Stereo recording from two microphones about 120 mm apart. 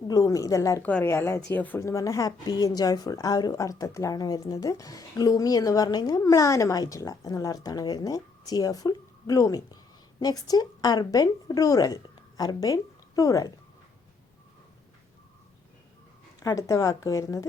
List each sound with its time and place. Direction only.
0.1 s speech: 30° left (ahead or behind)
0.8 s speech: 10° left (ahead or behind)
1.0 s speech: 20° left (ahead or behind)
1.9 s a woman's voice: 25° left (ahead or behind)
16.4 s speech: 30° left (ahead or behind)